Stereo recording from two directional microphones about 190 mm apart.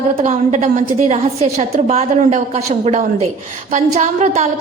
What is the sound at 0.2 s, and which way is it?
A woman's voice, 40° right (ahead or behind).